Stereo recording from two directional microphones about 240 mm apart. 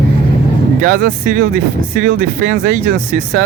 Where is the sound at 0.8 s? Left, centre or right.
Right.